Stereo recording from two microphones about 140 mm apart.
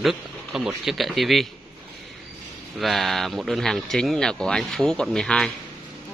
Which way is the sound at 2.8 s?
Centre (ahead or behind).